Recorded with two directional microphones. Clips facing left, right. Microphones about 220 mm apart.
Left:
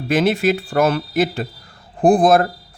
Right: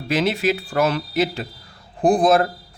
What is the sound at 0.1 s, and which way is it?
Speech, 50° left (ahead or behind).